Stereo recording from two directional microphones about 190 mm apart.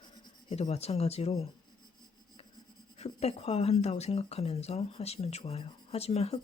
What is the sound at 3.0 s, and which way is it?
Speech, 35° left (ahead or behind).